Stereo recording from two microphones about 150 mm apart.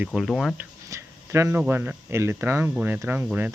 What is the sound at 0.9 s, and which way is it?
Speech, 20° right (ahead or behind).